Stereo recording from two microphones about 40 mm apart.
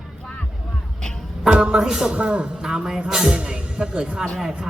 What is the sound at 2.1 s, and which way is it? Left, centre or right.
Speech, right.